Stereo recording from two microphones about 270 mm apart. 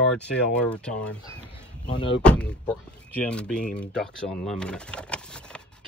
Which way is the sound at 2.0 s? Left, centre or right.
Centre.